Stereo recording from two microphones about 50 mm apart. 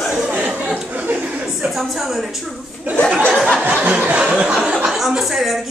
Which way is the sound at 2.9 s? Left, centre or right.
Right.